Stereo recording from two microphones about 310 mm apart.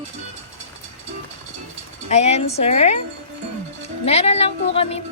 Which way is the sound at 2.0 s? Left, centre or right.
Left.